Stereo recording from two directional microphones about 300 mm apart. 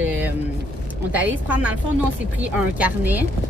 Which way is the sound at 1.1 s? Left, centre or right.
Centre.